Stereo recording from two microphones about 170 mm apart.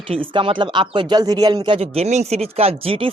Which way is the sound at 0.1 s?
30° right (ahead or behind).